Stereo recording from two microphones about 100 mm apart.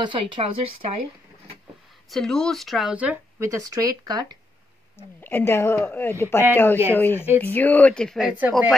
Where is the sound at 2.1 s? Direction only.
5° left (ahead or behind).